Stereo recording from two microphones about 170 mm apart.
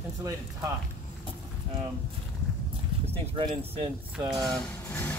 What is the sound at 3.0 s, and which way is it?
Speech, 35° right (ahead or behind).